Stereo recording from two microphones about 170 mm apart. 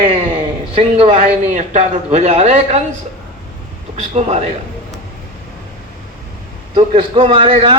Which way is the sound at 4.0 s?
40° right (ahead or behind).